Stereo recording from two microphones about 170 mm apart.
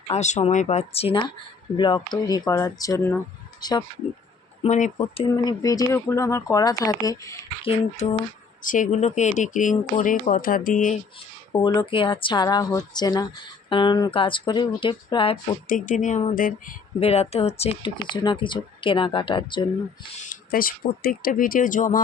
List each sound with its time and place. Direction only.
0.1 s speech: 40° left (ahead or behind); by 3.8 s 25° left (ahead or behind)
4.6 s speech: 40° left (ahead or behind); by 7.3 s 20° left (ahead or behind)
7.6 s speech: 40° left (ahead or behind)
8.6 s speech: 50° left (ahead or behind)
11.5 s speech: 25° left (ahead or behind)
15.7 s speech: 50° left (ahead or behind)
17.0 s speech: 35° left (ahead or behind)
20.2 s speech: 60° left (ahead or behind)